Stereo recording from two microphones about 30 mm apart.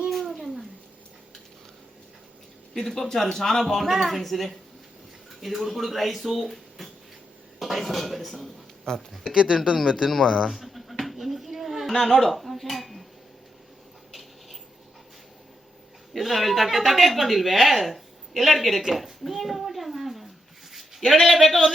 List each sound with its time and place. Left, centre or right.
0.1 s cat: centre
2.7 s speech: centre
3.8 s speech: centre
9.3 s speech: right
10.4 s a sound: centre
14.1 s a sound: centre
16.1 s speech: centre
18.8 s a sound: centre
21.2 s speech: centre